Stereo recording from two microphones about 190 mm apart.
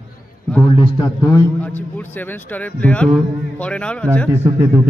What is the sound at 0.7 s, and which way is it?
A man's voice, 20° left (ahead or behind).